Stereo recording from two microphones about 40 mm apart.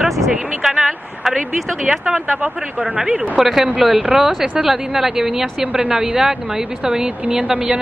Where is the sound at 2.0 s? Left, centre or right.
Right.